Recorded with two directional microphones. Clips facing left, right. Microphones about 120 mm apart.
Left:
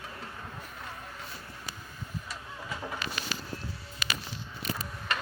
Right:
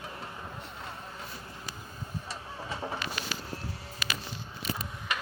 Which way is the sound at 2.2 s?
30° right (ahead or behind).